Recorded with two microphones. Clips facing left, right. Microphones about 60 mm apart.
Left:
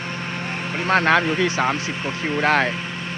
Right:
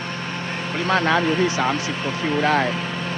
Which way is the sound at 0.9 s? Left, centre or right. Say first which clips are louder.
Left 3 dB; left.